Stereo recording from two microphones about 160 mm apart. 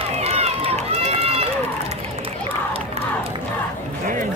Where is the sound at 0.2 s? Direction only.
40° right (ahead or behind).